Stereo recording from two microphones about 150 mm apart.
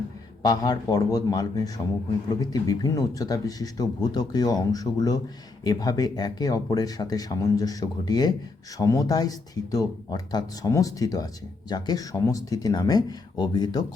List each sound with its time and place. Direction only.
0.4 s speech: 25° left (ahead or behind)